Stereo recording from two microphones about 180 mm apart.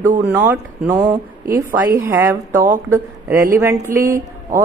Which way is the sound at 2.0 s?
15° right (ahead or behind).